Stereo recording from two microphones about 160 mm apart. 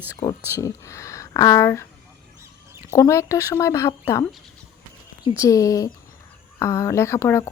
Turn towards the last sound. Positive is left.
turn(degrees=15)  # may be behind; listen again after turning